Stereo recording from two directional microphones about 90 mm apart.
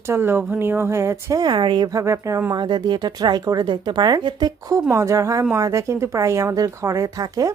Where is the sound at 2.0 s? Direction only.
35° right (ahead or behind).